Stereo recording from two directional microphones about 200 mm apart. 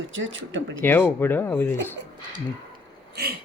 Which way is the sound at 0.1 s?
70° right (ahead or behind).